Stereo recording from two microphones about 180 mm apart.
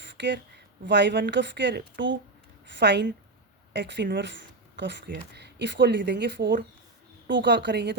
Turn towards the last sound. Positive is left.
turn(degrees=-70)  # may be behind; listen again after turning